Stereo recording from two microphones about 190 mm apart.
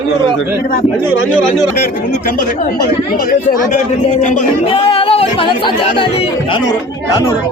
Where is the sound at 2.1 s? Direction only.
50° left (ahead or behind); by 6.6 s 25° left (ahead or behind).